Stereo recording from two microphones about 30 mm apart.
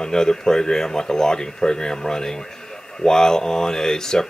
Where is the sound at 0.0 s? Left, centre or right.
Left.